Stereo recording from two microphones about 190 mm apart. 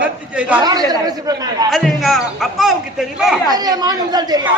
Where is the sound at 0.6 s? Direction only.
20° right (ahead or behind).